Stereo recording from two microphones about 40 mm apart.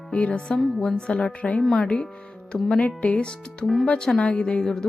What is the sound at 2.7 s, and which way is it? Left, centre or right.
Speech, left.